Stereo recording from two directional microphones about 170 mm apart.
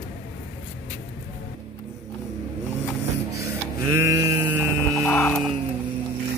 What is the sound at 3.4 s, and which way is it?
Printer, 15° right (ahead or behind).